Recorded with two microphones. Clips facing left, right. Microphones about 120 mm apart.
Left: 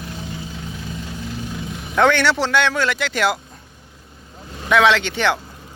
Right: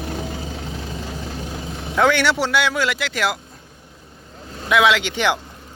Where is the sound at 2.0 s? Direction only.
10° right (ahead or behind).